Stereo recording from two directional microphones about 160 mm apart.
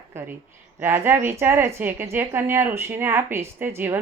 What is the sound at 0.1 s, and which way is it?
A woman's voice, 15° right (ahead or behind).